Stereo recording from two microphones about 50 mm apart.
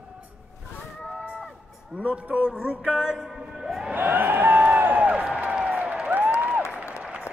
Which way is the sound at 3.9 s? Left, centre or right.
Right.